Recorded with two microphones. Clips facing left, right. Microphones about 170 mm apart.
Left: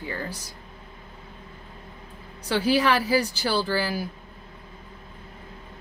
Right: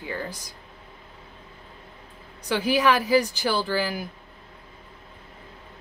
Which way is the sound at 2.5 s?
15° right (ahead or behind).